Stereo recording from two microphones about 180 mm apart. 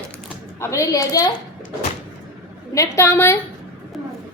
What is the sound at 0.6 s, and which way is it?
Speech, 15° left (ahead or behind).